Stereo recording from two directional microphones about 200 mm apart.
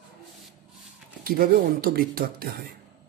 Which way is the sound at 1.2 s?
50° right (ahead or behind).